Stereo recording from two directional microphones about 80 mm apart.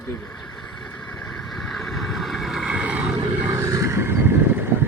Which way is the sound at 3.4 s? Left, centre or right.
Right.